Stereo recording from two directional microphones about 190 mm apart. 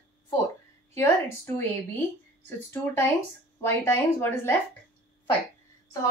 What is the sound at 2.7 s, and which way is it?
A woman's voice, 10° left (ahead or behind).